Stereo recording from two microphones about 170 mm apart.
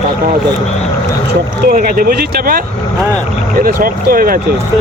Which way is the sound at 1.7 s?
55° right (ahead or behind).